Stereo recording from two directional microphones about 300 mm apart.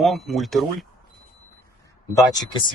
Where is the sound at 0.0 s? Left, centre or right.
Centre.